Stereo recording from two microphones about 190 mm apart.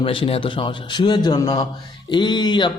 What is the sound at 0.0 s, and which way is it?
Speech, 30° left (ahead or behind).